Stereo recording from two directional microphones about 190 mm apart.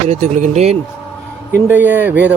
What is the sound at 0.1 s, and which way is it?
Speech, 40° right (ahead or behind).